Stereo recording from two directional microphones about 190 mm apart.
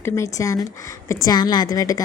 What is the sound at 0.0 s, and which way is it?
A woman's voice, 15° left (ahead or behind).